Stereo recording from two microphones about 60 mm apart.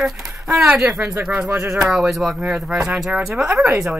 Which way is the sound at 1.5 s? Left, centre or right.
Right.